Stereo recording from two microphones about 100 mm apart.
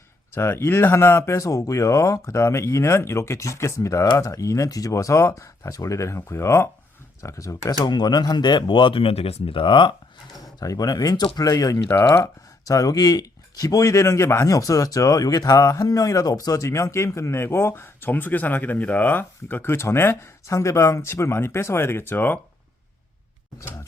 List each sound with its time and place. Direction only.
0.3 s speech: 25° left (ahead or behind); by 9.9 s 55° left (ahead or behind)
10.6 s speech: 40° left (ahead or behind)
11.9 s speech: 20° left (ahead or behind)
12.6 s speech: 35° left (ahead or behind); by 22.4 s 20° left (ahead or behind)
23.6 s speech: 30° left (ahead or behind)